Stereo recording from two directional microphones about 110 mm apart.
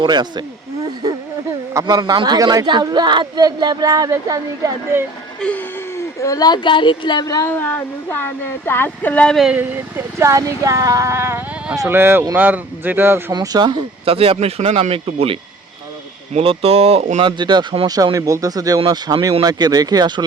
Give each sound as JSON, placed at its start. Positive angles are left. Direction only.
{"t": 0.0, "sound": "speech", "side_deg": -40}
{"t": 1.7, "sound": "speech", "side_deg": -35}
{"t": 5.4, "sound": "a sound", "side_deg": 10}
{"t": 6.1, "sound": "speech", "side_deg": 30}
{"t": 7.4, "sound": "speech", "side_deg": 15}
{"t": 9.5, "sound": "speech", "side_deg": -15}
{"t": 13.3, "sound": "speech", "side_deg": -40}
{"t": 14.0, "sound": "speech", "side_deg": -60}
{"t": 17.2, "sound": "speech", "side_deg": -45}